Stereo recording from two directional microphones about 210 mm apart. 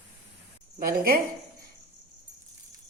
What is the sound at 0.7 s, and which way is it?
Speech, 45° right (ahead or behind).